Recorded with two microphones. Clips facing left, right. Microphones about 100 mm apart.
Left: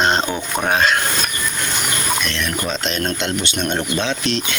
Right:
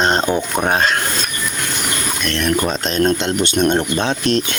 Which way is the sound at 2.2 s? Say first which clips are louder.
Right 5 dB; 50° right (ahead or behind).